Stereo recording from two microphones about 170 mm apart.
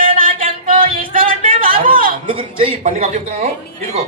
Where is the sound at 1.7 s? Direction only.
55° right (ahead or behind).